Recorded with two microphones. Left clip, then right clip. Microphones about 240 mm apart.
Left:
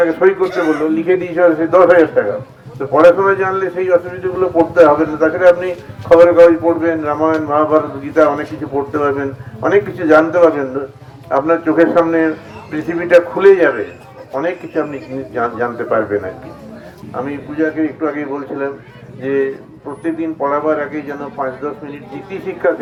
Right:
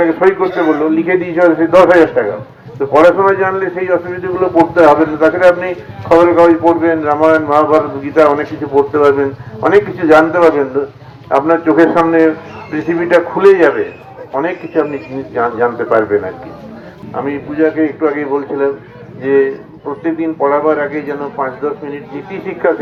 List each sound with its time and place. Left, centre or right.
0.0 s a man's voice: left
0.4 s a man's voice: centre
0.8 s a man's voice: left
17.2 s a man's voice: left